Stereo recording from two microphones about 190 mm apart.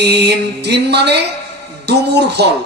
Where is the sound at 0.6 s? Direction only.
60° right (ahead or behind).